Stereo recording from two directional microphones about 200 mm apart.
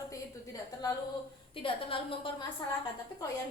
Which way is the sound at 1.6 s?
25° left (ahead or behind).